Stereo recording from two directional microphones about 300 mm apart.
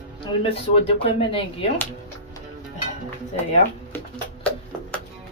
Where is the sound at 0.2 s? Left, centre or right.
Centre.